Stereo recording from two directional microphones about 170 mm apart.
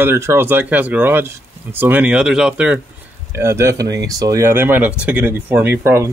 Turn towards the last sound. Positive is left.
turn(degrees=-15)  # may be behind; listen again after turning